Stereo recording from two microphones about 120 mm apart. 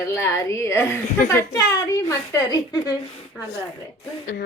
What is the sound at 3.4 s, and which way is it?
Speech, 5° right (ahead or behind).